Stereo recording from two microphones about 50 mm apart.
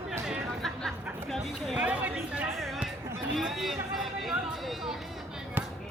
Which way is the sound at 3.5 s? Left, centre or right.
Centre.